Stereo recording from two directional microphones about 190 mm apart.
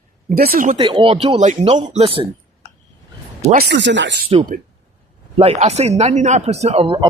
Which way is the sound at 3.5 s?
60° right (ahead or behind).